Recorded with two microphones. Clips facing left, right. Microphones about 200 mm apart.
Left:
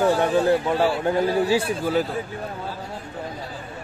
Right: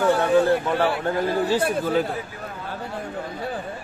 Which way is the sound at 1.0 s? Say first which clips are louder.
Left 2 dB; 10° left (ahead or behind).